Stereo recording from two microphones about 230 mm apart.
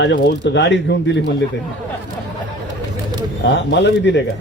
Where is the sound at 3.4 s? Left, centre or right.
Left.